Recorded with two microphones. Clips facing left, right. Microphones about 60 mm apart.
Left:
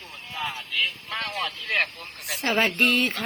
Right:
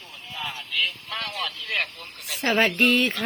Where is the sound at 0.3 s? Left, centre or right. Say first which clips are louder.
Left 1 dB; left.